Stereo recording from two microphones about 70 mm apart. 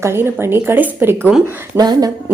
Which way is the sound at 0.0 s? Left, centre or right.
Right.